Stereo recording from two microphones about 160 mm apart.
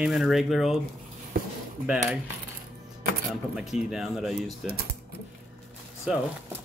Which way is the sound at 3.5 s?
5° right (ahead or behind).